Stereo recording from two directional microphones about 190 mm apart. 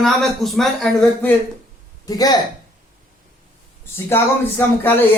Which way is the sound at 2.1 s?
20° left (ahead or behind).